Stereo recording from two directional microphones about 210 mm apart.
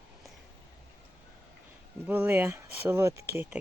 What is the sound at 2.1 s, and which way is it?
Speech, 10° right (ahead or behind).